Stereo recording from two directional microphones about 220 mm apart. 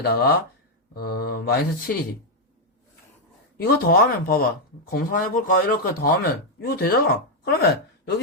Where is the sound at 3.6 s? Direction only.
45° left (ahead or behind).